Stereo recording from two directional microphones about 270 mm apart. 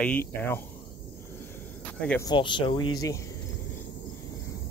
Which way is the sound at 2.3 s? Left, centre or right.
Centre.